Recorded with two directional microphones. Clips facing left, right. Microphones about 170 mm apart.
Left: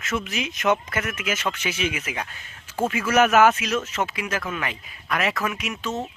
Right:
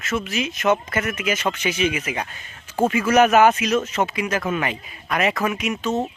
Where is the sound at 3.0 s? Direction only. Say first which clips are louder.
Right 2 dB; 15° right (ahead or behind).